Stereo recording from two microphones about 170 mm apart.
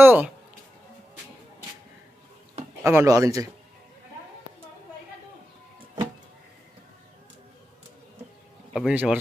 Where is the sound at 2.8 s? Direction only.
15° right (ahead or behind).